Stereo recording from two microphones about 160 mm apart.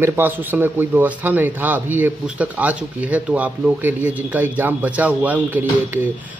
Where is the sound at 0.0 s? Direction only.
10° right (ahead or behind).